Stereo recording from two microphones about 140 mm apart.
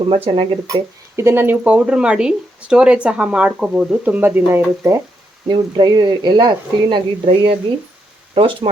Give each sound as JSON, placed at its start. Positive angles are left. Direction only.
{"t": 0.1, "sound": "speech", "side_deg": -35}
{"t": 1.1, "sound": "speech", "side_deg": -20}
{"t": 5.5, "sound": "speech", "side_deg": -30}